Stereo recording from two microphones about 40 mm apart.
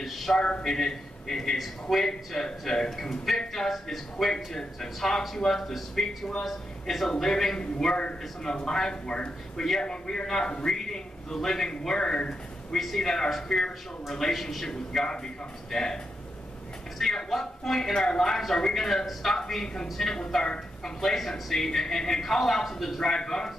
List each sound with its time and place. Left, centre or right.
0.0 s a sound: centre
0.4 s speech: left
0.7 s a man's voice: centre
12.7 s a man's voice: centre
14.7 s a man's voice: centre
17.0 s a man's voice: centre